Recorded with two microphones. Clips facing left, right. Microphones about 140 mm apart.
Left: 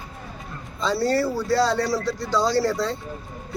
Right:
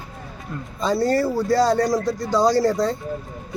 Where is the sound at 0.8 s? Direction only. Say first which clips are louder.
Right 2 dB; 45° right (ahead or behind).